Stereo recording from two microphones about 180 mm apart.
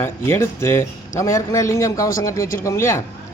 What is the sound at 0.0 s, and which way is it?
A man's voice, 15° left (ahead or behind).